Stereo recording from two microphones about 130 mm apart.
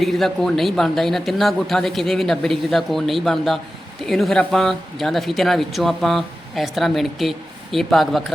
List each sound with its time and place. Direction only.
0.0 s speech: centre (ahead or behind)